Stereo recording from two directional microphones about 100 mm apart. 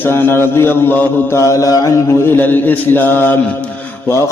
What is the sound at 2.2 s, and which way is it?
A man's voice, 20° left (ahead or behind).